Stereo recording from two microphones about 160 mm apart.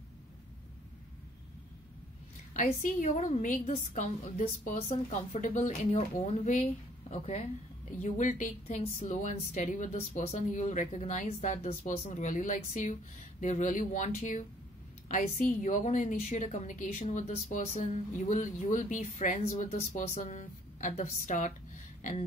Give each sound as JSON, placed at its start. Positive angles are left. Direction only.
{"t": 2.5, "sound": "a woman's voice", "side_deg": 50}